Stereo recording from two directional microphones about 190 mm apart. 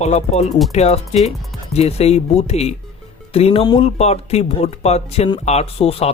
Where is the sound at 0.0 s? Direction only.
35° left (ahead or behind).